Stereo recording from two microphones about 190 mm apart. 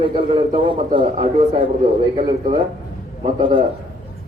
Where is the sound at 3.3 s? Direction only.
25° right (ahead or behind).